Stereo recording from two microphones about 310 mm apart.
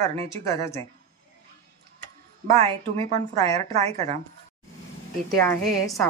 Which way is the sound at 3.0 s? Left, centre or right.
Centre.